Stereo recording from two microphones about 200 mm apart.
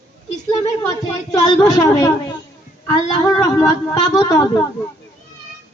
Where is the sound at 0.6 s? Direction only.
20° left (ahead or behind).